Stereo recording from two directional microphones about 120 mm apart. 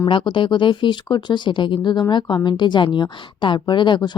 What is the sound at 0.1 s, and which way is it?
Speech, 45° left (ahead or behind).